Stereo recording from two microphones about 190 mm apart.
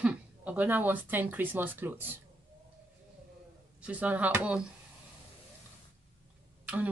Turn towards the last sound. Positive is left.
turn(degrees=-10)  # may be behind; listen again after turning